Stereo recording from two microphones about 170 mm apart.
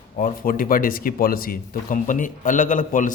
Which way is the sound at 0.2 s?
55° left (ahead or behind).